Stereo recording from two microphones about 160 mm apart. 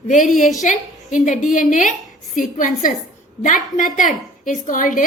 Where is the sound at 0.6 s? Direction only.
50° left (ahead or behind).